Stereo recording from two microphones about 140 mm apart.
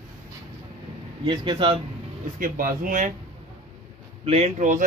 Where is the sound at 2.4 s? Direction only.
85° right.